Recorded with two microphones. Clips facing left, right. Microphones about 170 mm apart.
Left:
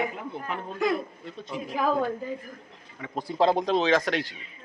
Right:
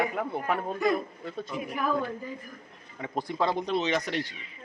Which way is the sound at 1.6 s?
90° left.